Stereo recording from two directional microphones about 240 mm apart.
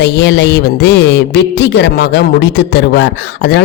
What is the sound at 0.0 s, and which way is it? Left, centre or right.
Speech, left.